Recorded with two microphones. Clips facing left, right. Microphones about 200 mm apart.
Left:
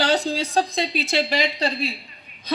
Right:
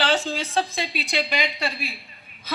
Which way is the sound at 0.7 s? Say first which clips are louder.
Left 5 dB; 20° left (ahead or behind).